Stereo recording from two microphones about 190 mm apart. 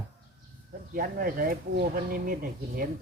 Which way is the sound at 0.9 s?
50° right (ahead or behind).